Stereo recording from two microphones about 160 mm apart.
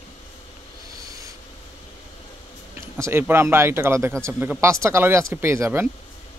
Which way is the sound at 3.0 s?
15° right (ahead or behind).